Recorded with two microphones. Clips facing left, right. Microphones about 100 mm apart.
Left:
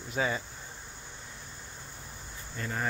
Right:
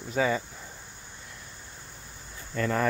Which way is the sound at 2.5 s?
90° right.